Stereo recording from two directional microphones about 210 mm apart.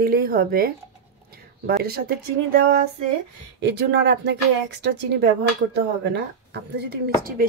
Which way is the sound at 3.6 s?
55° right (ahead or behind).